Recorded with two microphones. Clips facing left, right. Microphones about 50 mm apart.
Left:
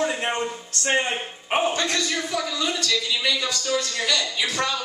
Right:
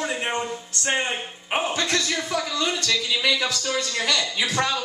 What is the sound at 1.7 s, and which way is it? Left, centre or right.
Speech, left.